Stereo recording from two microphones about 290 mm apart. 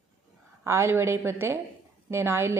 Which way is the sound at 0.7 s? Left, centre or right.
Centre.